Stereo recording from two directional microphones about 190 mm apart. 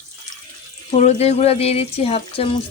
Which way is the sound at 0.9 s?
35° left (ahead or behind).